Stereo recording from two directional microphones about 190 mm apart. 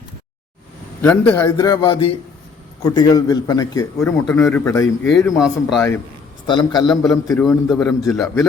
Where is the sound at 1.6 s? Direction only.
25° left (ahead or behind).